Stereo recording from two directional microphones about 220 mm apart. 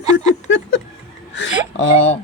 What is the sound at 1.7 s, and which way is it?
Speech, 55° left (ahead or behind).